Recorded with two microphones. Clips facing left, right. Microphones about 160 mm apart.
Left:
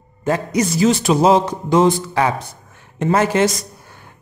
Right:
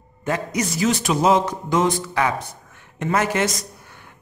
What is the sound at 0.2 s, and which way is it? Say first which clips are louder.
A man's voice: left 5 dB; 35° left (ahead or behind).